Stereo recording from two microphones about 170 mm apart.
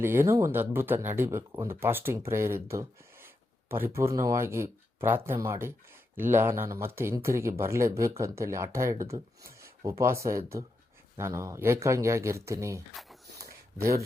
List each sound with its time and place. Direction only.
0.0 s speech: 15° right (ahead or behind)
12.9 s speech: centre (ahead or behind)